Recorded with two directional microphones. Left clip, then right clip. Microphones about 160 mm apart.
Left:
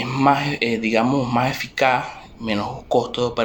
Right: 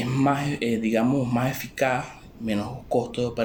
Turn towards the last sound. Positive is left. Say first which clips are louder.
# left 5 dB
turn(degrees=-15)  # may be behind; listen again after turning